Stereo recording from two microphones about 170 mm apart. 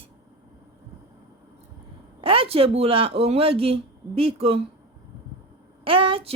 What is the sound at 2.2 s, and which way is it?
A woman's voice, 35° right (ahead or behind).